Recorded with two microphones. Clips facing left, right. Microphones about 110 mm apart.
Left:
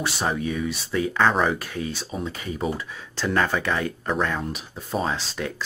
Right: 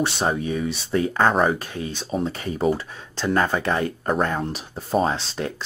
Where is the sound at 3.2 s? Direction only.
20° right (ahead or behind).